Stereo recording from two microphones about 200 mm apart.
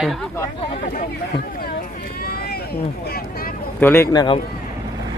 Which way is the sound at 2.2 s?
50° left (ahead or behind).